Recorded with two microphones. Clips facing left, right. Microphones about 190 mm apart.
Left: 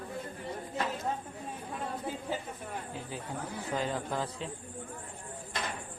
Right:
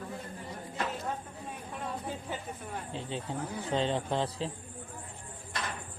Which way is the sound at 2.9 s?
25° right (ahead or behind).